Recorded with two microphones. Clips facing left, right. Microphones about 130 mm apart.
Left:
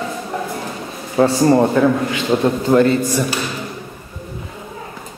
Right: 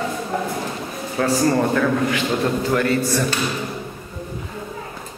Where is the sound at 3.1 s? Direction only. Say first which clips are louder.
Left 2 dB; 10° left (ahead or behind).